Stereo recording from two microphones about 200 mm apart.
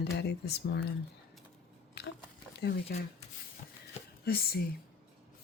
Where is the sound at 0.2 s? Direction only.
55° left (ahead or behind).